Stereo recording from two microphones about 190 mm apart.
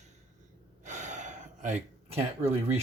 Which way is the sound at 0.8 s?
40° right (ahead or behind).